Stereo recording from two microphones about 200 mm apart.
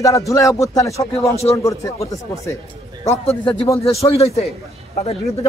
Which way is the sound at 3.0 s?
30° left (ahead or behind).